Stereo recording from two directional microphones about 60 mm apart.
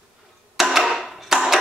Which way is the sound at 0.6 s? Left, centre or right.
Centre.